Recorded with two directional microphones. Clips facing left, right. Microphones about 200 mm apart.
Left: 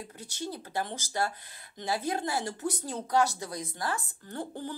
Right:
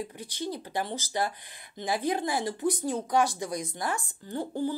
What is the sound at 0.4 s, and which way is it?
Speech, 15° right (ahead or behind).